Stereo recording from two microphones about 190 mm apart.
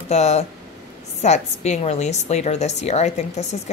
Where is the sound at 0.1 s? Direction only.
35° left (ahead or behind).